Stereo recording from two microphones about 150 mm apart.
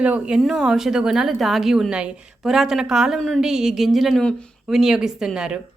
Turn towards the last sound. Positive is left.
turn(degrees=-5)  # may be behind; listen again after turning